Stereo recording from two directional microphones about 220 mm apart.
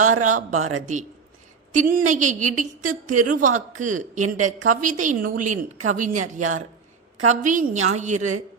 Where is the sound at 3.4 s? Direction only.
35° right (ahead or behind).